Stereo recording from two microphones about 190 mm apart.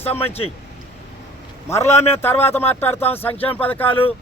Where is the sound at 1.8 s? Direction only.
35° left (ahead or behind).